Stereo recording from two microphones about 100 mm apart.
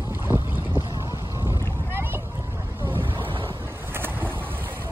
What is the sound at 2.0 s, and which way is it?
Boat, 25° right (ahead or behind).